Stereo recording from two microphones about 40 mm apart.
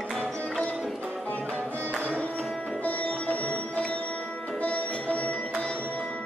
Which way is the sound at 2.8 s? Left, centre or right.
Left.